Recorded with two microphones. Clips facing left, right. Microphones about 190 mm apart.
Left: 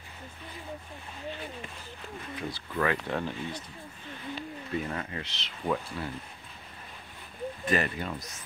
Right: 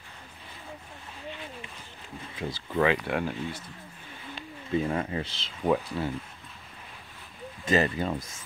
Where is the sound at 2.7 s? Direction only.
20° right (ahead or behind).